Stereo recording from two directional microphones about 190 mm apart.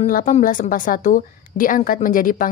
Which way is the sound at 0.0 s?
40° left (ahead or behind).